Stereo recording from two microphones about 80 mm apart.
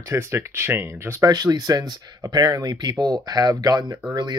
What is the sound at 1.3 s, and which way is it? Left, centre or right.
Speech, right.